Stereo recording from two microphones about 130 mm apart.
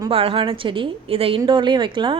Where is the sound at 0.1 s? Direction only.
45° right (ahead or behind).